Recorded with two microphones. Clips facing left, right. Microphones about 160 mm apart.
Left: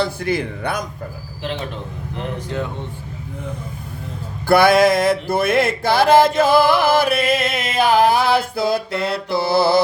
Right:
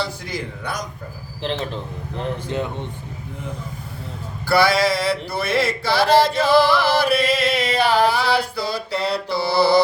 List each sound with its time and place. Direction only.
0.0 s a man's voice: 60° left (ahead or behind)
2.5 s speech: 20° right (ahead or behind)
4.4 s a sound: 55° left (ahead or behind)